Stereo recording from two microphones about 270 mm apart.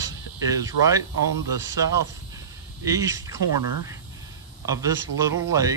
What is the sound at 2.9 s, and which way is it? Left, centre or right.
Speech, centre.